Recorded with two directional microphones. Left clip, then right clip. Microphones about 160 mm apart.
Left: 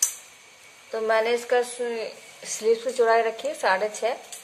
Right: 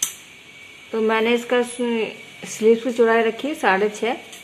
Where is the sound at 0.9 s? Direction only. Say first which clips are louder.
Right 3 dB; 20° right (ahead or behind).